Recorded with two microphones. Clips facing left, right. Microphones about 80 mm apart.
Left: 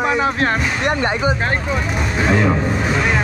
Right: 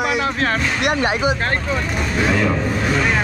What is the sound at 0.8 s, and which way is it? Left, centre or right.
Speech, centre.